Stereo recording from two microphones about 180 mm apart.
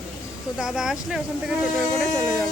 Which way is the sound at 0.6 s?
5° right (ahead or behind).